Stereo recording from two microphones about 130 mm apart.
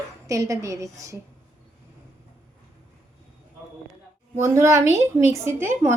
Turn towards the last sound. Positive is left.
turn(degrees=-20)  # may be behind; listen again after turning